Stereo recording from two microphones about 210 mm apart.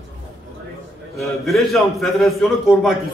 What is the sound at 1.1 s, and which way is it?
A man's voice, centre (ahead or behind).